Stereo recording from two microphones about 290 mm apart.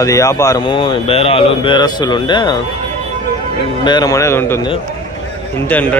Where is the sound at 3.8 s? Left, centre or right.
Centre.